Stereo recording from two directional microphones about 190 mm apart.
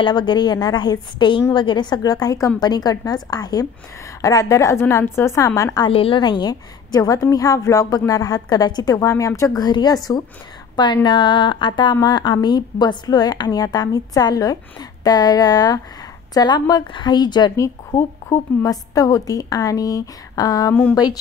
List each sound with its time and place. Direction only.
0.0 s a woman's voice: 25° left (ahead or behind)
5.9 s a woman's voice: 30° left (ahead or behind)